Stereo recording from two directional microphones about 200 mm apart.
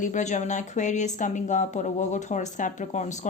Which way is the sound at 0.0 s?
40° left (ahead or behind).